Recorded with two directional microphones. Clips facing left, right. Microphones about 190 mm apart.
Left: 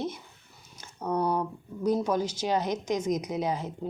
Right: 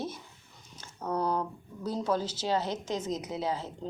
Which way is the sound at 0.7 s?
15° left (ahead or behind).